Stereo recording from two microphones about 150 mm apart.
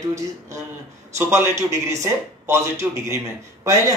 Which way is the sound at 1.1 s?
20° right (ahead or behind).